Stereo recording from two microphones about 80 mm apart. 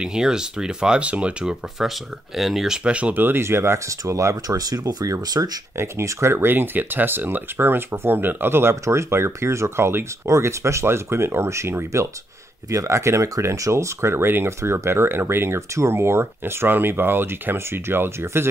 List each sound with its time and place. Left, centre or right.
0.0 s speech: centre; by 5.6 s right
5.8 s speech: right